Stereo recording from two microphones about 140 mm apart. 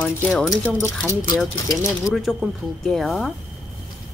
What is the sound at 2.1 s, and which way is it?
Speech, 5° right (ahead or behind).